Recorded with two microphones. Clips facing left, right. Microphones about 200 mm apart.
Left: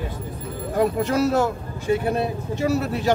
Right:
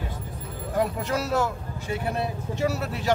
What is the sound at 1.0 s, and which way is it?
Speech, 50° left (ahead or behind).